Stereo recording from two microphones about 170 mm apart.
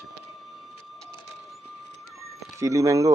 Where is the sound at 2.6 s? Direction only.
20° right (ahead or behind).